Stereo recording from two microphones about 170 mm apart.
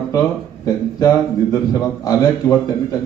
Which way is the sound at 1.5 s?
20° left (ahead or behind).